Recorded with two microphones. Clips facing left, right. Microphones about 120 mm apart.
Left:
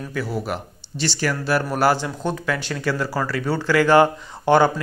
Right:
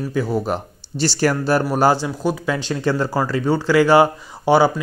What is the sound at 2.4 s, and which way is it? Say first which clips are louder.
Speech: right 3 dB; 20° right (ahead or behind).